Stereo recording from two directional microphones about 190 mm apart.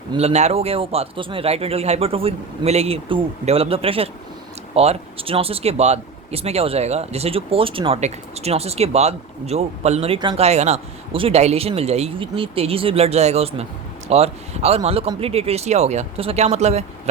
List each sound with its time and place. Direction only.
0.1 s speech: 35° right (ahead or behind)